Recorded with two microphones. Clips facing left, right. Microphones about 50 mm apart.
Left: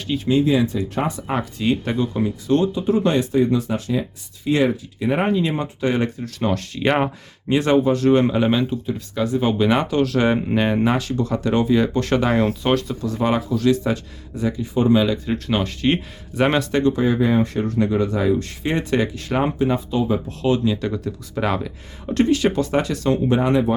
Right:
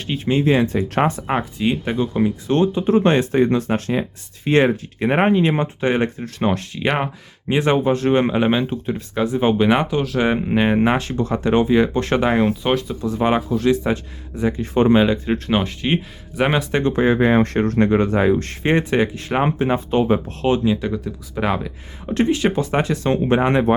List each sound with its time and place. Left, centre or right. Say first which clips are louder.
0.0 s speech: left 1 dB; right
1.5 s speech: right 1 dB; centre
6.7 s speech: left 2 dB; centre
7.4 s speech: even; right
13.0 s speech: right 2 dB; right
14.6 s speech: right 2 dB; right
14.9 s speech: right 2 dB; right
15.9 s speech: left 1 dB; centre
16.7 s speech: right 1 dB; right
18.9 s speech: right 2 dB; right
20.7 s speech: right 2 dB; centre
22.1 s speech: even; right